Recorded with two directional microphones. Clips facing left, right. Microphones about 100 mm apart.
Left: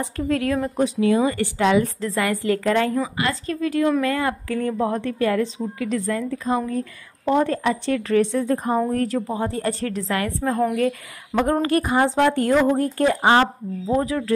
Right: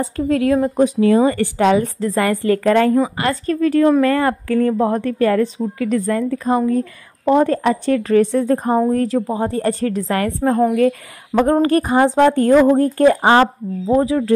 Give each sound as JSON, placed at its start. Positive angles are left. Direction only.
{"t": 0.0, "sound": "a woman's voice", "side_deg": -25}
{"t": 1.3, "sound": "a woman's voice", "side_deg": -50}
{"t": 1.8, "sound": "a woman's voice", "side_deg": -35}
{"t": 2.9, "sound": "speech", "side_deg": -35}
{"t": 3.4, "sound": "a woman's voice", "side_deg": -50}
{"t": 8.3, "sound": "a woman's voice", "side_deg": -55}
{"t": 8.6, "sound": "speech", "side_deg": -35}
{"t": 9.5, "sound": "a woman's voice", "side_deg": -45}